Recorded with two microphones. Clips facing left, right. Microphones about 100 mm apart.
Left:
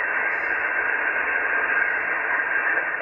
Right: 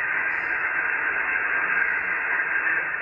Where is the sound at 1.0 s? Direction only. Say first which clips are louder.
Left 2 dB; 35° left (ahead or behind).